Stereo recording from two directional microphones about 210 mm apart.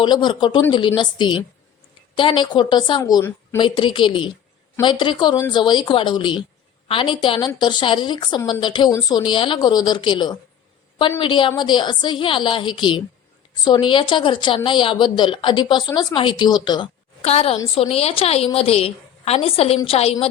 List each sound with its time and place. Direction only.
0.0 s a woman's voice: 20° left (ahead or behind)